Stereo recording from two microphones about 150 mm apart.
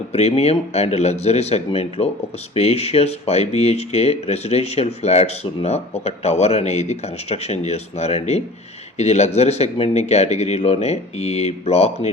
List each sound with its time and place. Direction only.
0.1 s speech: 45° left (ahead or behind)